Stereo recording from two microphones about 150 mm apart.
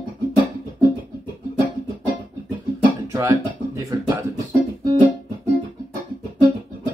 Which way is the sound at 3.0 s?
20° right (ahead or behind).